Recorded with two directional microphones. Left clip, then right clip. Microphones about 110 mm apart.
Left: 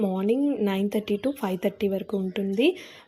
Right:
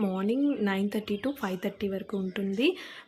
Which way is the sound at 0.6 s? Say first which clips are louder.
Left 4 dB; 25° left (ahead or behind).